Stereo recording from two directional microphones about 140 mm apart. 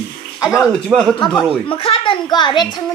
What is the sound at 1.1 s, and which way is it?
A child's voice, 30° left (ahead or behind).